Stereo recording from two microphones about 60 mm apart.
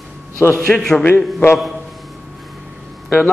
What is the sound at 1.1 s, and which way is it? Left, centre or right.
Speech, left.